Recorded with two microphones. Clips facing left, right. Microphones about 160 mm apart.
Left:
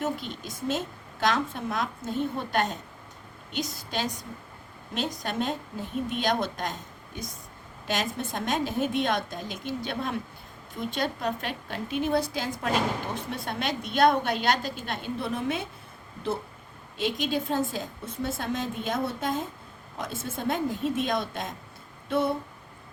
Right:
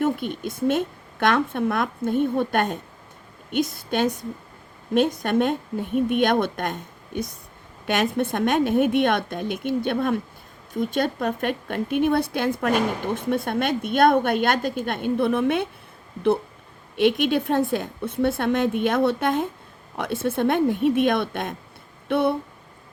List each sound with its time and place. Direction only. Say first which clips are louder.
0.0 s a woman's voice: right 8 dB; 55° right (ahead or behind)
17.0 s a woman's voice: right 8 dB; 65° right (ahead or behind)